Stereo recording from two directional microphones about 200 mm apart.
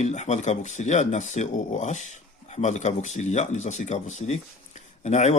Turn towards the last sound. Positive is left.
turn(degrees=35)  # may be behind; listen again after turning